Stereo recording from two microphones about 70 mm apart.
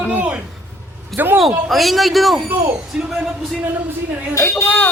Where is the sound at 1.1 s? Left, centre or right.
Right.